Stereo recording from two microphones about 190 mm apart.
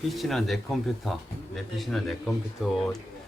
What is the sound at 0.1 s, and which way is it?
Speech, centre (ahead or behind).